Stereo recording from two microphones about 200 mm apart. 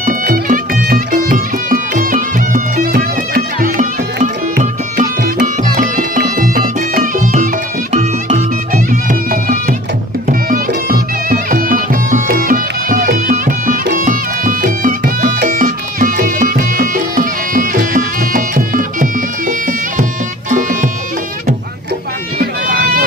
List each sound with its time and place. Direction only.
0.0 s music: 45° right (ahead or behind)
22.4 s run: 45° right (ahead or behind)